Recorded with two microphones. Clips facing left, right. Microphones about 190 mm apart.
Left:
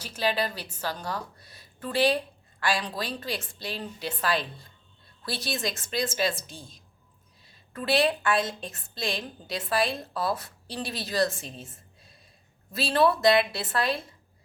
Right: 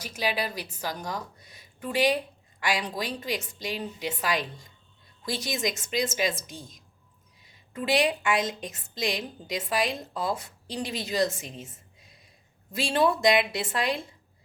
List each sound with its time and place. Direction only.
0.0 s a woman's voice: 10° right (ahead or behind)